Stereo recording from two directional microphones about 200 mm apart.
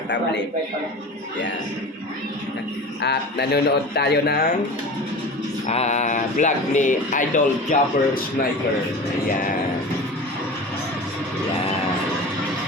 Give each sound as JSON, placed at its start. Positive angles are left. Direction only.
{"t": 3.0, "sound": "a man's voice", "side_deg": 55}
{"t": 5.6, "sound": "speech", "side_deg": 35}